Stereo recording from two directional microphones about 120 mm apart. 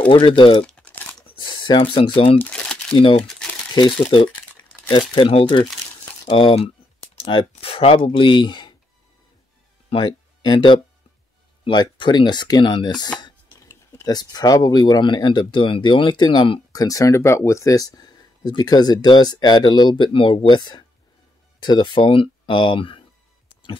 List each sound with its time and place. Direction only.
0.1 s speech: 45° left (ahead or behind)
0.7 s crumpling: 15° left (ahead or behind)
1.2 s speech: 40° left (ahead or behind)
2.3 s crumpling: 10° left (ahead or behind)
3.7 s speech: 40° left (ahead or behind)
7.6 s speech: 55° left (ahead or behind)
9.8 s speech: 40° left (ahead or behind)
16.7 s speech: 30° left (ahead or behind); by 23.0 s 45° left (ahead or behind)